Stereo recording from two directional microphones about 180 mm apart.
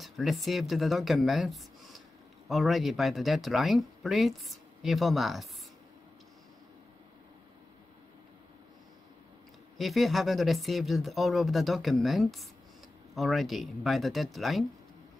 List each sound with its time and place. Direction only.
0.0 s speech: centre (ahead or behind)
9.8 s speech: centre (ahead or behind)